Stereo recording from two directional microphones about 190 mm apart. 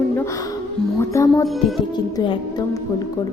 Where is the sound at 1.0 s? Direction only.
15° left (ahead or behind).